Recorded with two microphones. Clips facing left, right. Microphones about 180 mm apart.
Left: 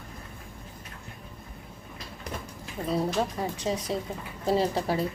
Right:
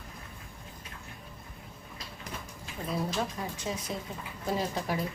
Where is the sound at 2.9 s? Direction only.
35° left (ahead or behind).